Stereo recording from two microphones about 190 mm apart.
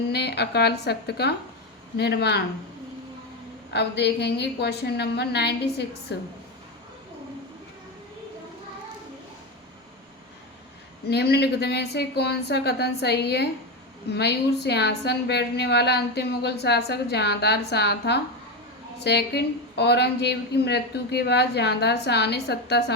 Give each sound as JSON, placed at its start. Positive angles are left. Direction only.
{"t": 0.1, "sound": "a woman's voice", "side_deg": 60}
{"t": 3.7, "sound": "a woman's voice", "side_deg": 60}
{"t": 11.1, "sound": "a woman's voice", "side_deg": 60}